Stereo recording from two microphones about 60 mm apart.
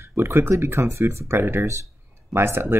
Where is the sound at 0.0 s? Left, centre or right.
Right.